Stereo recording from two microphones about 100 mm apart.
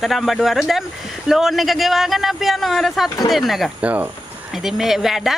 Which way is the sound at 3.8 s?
15° right (ahead or behind).